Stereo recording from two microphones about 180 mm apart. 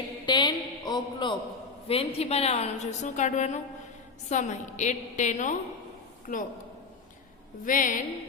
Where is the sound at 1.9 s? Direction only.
35° left (ahead or behind).